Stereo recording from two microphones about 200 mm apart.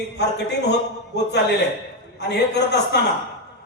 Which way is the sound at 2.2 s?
60° left (ahead or behind).